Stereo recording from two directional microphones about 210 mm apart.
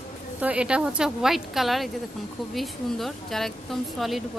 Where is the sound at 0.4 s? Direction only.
5° right (ahead or behind).